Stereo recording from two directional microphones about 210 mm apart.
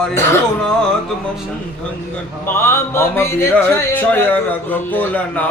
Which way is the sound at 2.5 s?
10° left (ahead or behind).